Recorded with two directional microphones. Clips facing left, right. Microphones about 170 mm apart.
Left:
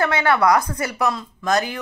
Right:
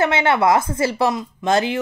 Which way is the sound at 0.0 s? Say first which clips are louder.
Right 1 dB; 25° right (ahead or behind).